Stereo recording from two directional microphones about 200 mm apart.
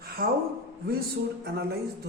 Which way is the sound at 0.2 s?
45° right (ahead or behind).